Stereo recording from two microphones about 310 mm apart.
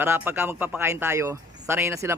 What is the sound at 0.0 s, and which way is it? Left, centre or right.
Speech, centre.